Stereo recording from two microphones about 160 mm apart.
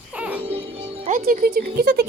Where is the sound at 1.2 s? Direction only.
65° right (ahead or behind).